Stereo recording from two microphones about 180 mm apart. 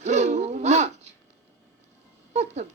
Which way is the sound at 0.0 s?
40° right (ahead or behind).